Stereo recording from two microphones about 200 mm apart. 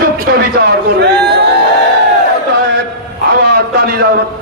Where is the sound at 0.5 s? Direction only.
55° right (ahead or behind).